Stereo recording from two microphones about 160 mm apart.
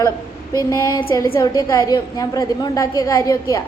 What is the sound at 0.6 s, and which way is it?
A woman's voice, 25° left (ahead or behind).